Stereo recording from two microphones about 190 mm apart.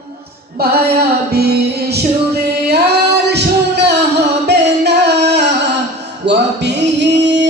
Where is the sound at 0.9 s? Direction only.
55° right (ahead or behind).